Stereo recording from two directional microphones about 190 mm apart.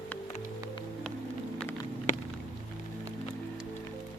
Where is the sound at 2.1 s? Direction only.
40° left (ahead or behind).